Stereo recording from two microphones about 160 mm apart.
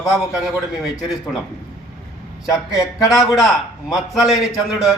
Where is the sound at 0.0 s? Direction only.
25° left (ahead or behind).